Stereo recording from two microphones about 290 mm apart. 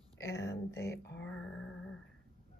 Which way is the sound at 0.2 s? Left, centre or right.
Centre.